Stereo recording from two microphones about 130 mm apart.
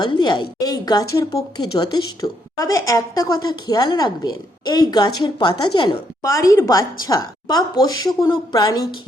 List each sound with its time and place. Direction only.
0.0 s a woman's voice: 35° left (ahead or behind)
6.2 s a woman's voice: 25° left (ahead or behind)